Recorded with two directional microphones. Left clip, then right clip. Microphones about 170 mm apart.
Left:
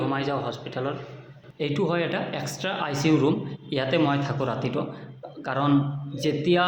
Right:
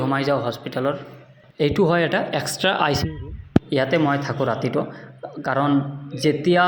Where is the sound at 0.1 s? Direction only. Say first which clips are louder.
Right 6 dB; 25° right (ahead or behind).